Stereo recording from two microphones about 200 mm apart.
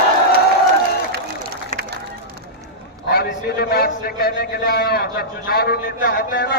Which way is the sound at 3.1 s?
50° left (ahead or behind).